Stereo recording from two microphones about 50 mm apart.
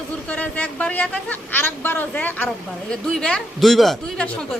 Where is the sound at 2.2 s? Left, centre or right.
Left.